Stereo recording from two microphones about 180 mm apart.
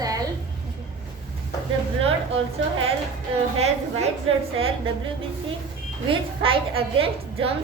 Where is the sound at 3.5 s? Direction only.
35° right (ahead or behind).